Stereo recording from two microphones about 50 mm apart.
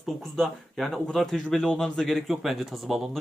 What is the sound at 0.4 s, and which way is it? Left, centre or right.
Speech, centre.